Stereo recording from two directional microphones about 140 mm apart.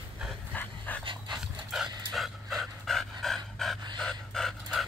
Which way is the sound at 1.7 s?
Centre (ahead or behind).